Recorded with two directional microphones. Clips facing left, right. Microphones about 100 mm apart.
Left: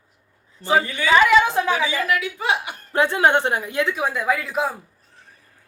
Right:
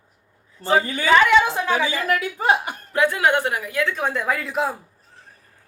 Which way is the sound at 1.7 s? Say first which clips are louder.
Even; 45° right (ahead or behind).